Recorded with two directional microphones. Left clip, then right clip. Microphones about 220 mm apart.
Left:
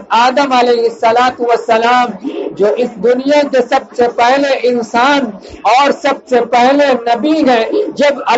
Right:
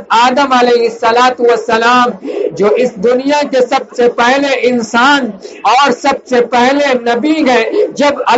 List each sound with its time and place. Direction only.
0.1 s a man's voice: 20° right (ahead or behind)